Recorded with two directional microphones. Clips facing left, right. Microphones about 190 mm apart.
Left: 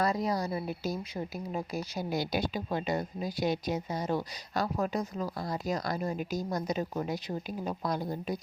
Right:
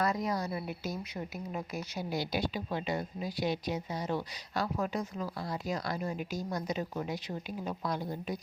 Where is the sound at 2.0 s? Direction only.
50° left (ahead or behind).